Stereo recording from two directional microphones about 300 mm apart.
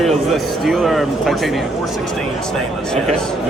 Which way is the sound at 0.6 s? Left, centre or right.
Centre.